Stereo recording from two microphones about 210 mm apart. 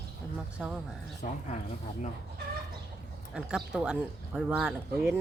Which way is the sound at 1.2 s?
35° left (ahead or behind).